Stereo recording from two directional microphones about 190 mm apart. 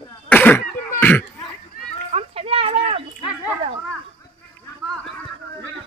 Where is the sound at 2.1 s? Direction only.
30° right (ahead or behind).